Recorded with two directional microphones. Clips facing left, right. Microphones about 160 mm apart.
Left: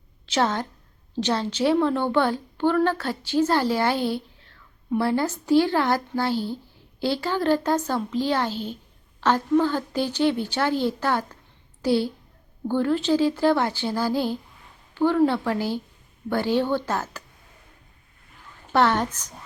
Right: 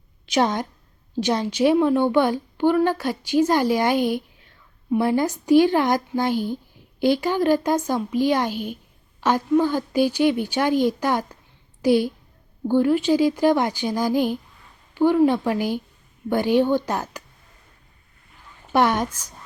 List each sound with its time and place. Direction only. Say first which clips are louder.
0.3 s a woman's voice: right 3 dB; 15° right (ahead or behind)
18.7 s a woman's voice: right 1 dB; 15° right (ahead or behind)